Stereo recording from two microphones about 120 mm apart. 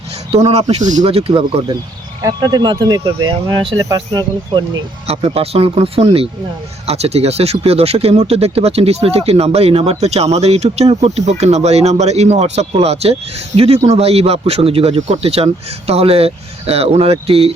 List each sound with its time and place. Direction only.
0.3 s speech: 55° right (ahead or behind); by 1.0 s 85° right
1.0 s speech: 50° right (ahead or behind)
2.2 s speech: 35° right (ahead or behind)
5.0 s speech: 55° right (ahead or behind)